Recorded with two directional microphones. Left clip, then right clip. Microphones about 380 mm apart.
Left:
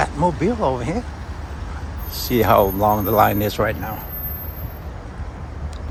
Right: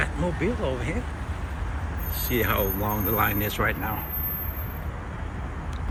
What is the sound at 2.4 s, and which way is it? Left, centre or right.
Speech, centre.